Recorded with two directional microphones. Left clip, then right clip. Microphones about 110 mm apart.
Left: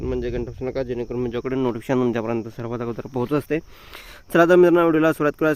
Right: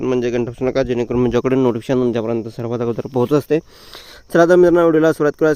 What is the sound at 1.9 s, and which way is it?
Speech, 30° right (ahead or behind).